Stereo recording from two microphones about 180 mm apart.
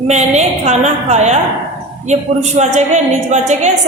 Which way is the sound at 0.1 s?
40° right (ahead or behind).